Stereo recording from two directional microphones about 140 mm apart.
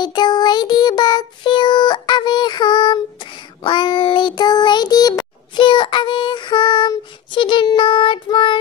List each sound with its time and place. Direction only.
0.0 s child singing: 30° left (ahead or behind)